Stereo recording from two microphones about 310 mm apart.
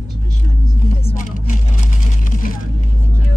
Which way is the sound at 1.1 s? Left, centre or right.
Left.